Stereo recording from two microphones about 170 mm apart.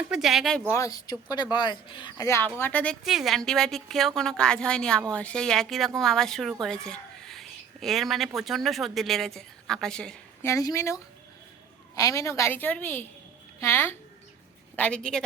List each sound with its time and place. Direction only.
0.1 s speech: centre (ahead or behind)
0.7 s speech: 20° left (ahead or behind)
10.4 s a woman's voice: 20° left (ahead or behind)